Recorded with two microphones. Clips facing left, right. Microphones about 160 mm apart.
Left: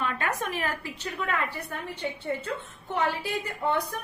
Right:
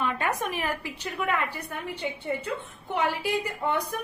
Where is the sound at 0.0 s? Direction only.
15° right (ahead or behind).